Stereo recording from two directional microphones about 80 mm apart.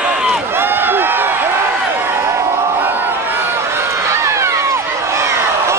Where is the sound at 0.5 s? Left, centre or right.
Right.